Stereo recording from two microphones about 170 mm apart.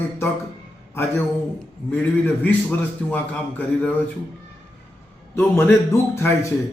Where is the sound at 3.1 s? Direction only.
10° left (ahead or behind).